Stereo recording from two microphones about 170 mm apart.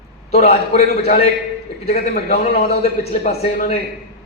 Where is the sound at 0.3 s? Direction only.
40° left (ahead or behind).